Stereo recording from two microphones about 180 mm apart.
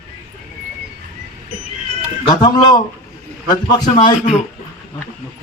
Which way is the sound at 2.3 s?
25° left (ahead or behind).